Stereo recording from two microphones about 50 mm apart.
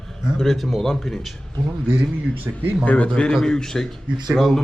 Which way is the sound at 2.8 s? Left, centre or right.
Left.